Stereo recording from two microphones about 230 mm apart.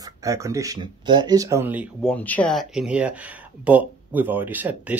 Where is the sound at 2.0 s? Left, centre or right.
Centre.